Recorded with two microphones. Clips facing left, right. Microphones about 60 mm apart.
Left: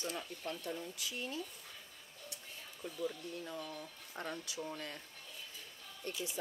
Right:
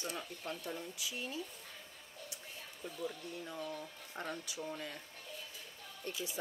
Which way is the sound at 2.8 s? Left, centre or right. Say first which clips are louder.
Left 2 dB; centre.